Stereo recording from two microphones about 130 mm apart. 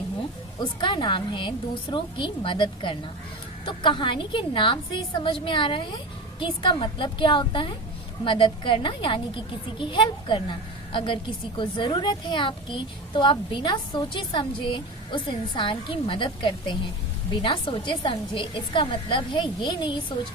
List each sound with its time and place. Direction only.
0.6 s a child's voice: 40° left (ahead or behind)